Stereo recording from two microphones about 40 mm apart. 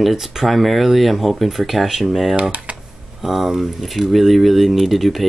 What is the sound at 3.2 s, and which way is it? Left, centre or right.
Speech, centre.